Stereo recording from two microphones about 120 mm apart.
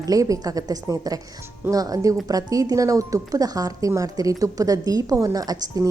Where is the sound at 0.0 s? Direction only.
30° right (ahead or behind).